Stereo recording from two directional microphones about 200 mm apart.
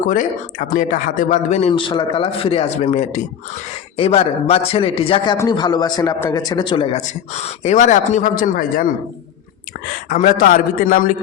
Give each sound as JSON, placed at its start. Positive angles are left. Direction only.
{"t": 0.7, "sound": "a man's voice", "side_deg": 40}
{"t": 6.9, "sound": "a man's voice", "side_deg": 35}
{"t": 10.1, "sound": "a man's voice", "side_deg": 40}